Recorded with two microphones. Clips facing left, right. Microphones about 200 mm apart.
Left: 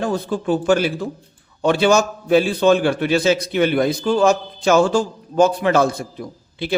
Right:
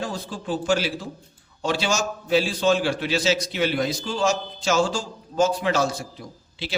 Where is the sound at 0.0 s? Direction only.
60° left (ahead or behind).